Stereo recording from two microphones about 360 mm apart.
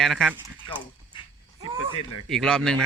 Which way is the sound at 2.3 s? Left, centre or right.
Centre.